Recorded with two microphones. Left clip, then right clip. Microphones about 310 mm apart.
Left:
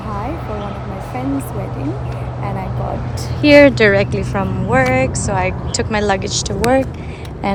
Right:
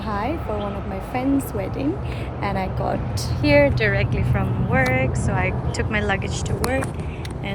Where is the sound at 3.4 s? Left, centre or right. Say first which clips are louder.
Left 9 dB; left.